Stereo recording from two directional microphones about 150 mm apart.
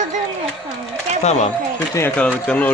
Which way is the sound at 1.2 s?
50° left (ahead or behind).